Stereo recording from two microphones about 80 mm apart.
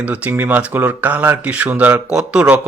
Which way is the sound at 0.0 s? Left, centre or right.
Right.